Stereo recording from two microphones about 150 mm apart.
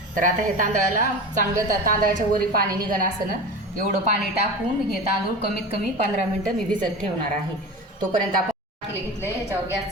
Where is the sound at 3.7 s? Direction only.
60° right (ahead or behind).